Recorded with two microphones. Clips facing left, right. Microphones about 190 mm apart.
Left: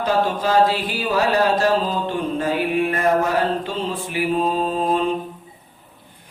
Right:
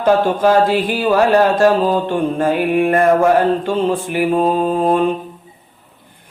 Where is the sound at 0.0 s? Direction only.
50° right (ahead or behind).